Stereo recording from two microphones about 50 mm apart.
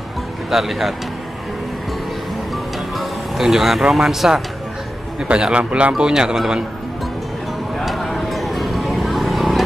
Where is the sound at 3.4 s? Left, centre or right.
Centre.